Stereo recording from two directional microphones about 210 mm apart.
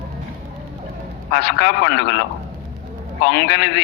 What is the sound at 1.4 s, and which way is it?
Speech, 55° left (ahead or behind).